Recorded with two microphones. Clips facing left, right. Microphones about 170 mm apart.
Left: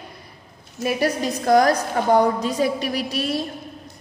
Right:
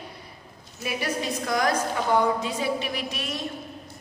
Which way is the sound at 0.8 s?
40° left (ahead or behind).